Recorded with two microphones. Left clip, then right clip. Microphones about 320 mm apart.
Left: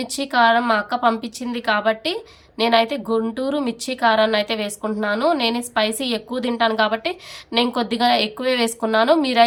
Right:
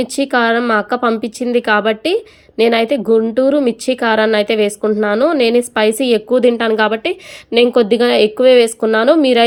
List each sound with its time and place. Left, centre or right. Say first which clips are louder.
0.0 s a woman's voice: right 3 dB; centre